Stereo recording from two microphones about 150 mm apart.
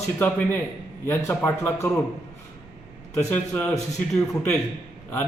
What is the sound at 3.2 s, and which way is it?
Speech, 10° left (ahead or behind).